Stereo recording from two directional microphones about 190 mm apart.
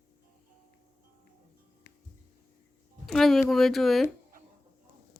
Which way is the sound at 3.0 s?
Centre (ahead or behind).